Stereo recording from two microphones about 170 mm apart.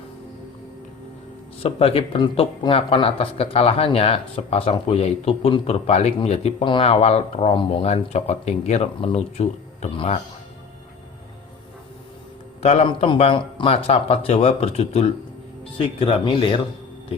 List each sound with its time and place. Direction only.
1.6 s speech: 35° left (ahead or behind)
12.6 s speech: 40° left (ahead or behind)